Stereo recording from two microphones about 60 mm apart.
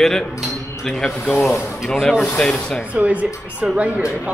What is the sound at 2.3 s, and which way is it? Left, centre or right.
Speech, centre.